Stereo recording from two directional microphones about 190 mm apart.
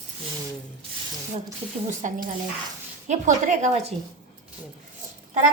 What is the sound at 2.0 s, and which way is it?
Speech, 40° right (ahead or behind).